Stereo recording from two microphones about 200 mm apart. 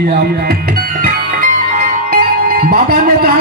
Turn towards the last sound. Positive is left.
turn(degrees=-50)  # may be behind; listen again after turning